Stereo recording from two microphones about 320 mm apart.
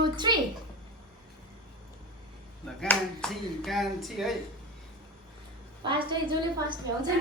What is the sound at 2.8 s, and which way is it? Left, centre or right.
Speech, centre.